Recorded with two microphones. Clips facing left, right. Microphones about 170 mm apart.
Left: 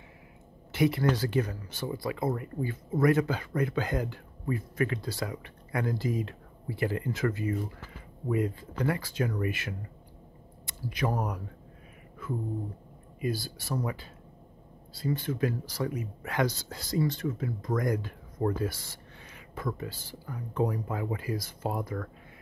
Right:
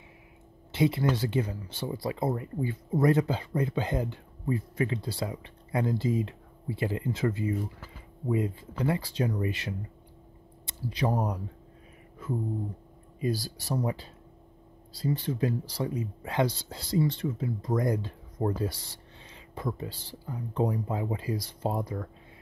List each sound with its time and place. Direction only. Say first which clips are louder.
0.7 s speech: even; 25° right (ahead or behind)
10.6 s a sound: right 1 dB; 30° right (ahead or behind)
11.1 s speech: right 2 dB; 30° right (ahead or behind)
13.2 s speech: right 2 dB; 35° right (ahead or behind)